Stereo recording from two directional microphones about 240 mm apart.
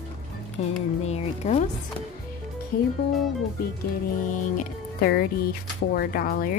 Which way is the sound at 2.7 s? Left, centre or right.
Left.